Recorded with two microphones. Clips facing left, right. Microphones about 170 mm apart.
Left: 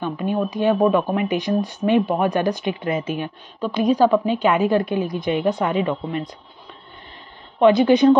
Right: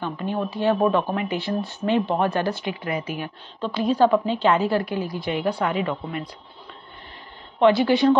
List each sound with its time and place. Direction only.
0.0 s a woman's voice: 15° left (ahead or behind)
7.5 s a woman's voice: 20° left (ahead or behind)